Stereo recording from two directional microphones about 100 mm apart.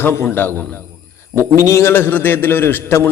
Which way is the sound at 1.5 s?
30° left (ahead or behind).